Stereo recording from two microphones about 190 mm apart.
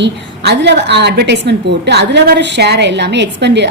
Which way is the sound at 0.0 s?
65° right (ahead or behind).